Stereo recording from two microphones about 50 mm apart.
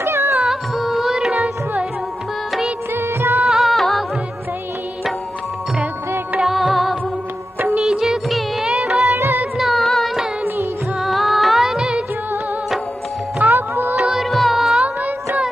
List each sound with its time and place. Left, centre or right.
0.0 s music: right
0.3 s music: centre
2.9 s music: right
3.4 s music: centre
6.4 s music: centre
7.8 s music of bollywood: centre
9.6 s music: centre
13.5 s music: right
13.9 s music: centre
14.2 s music: centre